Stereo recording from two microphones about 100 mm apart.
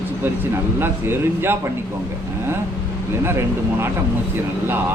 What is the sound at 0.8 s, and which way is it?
Speech, 20° right (ahead or behind).